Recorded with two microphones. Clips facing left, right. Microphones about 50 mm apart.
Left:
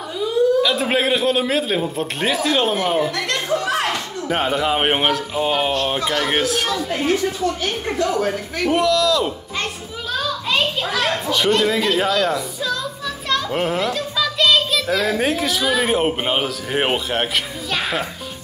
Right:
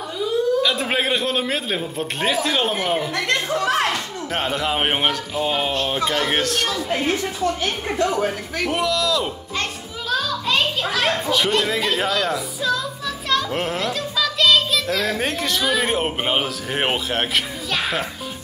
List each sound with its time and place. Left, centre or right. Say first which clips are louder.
0.2 s speech: left 3 dB; centre
7.6 s a woman's voice: left 1 dB; right
8.3 s children playing: left 4 dB; centre
13.3 s a child's voice: left 2 dB; centre